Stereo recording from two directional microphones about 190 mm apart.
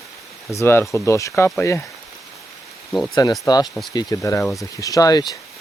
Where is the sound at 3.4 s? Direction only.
20° left (ahead or behind).